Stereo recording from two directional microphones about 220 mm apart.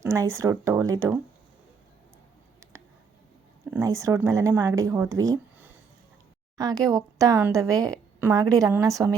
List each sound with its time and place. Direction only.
0.0 s a woman's voice: 10° right (ahead or behind)
3.7 s a woman's voice: 15° right (ahead or behind)